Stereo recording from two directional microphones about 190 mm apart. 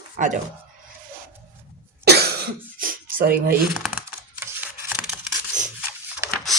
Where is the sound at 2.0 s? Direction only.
60° right (ahead or behind).